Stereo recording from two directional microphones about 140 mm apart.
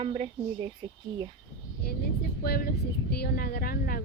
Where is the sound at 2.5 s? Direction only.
90° left.